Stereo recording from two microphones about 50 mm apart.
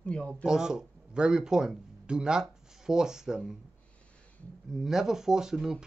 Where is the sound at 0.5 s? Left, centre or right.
Centre.